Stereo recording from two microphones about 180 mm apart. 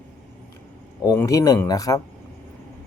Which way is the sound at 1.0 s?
15° left (ahead or behind).